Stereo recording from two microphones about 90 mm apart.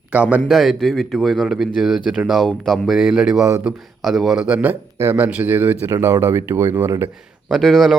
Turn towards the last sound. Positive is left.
turn(degrees=0)  # may be behind; listen again after turning